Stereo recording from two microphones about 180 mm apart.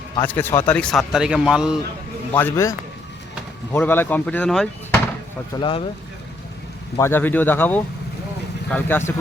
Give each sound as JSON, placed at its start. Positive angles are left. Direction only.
{"t": 0.3, "sound": "a man's voice", "side_deg": 10}
{"t": 2.3, "sound": "speech", "side_deg": 15}
{"t": 5.5, "sound": "speech", "side_deg": 30}
{"t": 7.0, "sound": "speech", "side_deg": 10}